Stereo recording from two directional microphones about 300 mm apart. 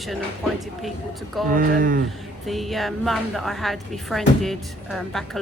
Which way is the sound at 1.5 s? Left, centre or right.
Right.